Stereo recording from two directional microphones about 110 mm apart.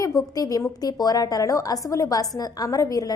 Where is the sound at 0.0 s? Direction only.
30° left (ahead or behind).